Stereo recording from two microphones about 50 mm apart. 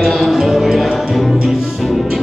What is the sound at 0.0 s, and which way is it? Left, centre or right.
Music, centre.